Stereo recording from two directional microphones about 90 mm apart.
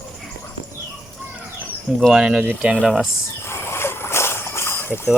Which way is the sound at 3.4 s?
30° left (ahead or behind).